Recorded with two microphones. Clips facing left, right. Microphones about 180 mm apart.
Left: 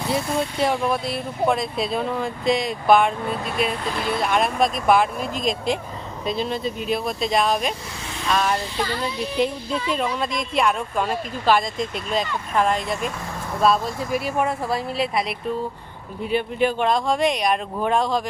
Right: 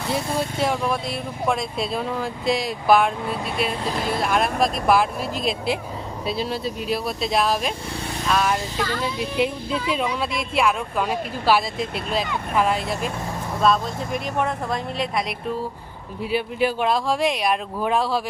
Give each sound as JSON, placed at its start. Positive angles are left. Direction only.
{"t": 0.1, "sound": "speech", "side_deg": 0}
{"t": 3.8, "sound": "speech", "side_deg": -40}
{"t": 4.1, "sound": "speech", "side_deg": 0}
{"t": 16.2, "sound": "speech", "side_deg": -5}